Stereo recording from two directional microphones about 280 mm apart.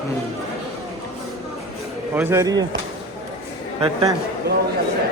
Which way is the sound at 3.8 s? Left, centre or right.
Centre.